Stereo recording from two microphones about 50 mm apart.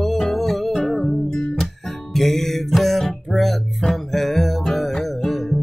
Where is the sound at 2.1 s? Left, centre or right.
Centre.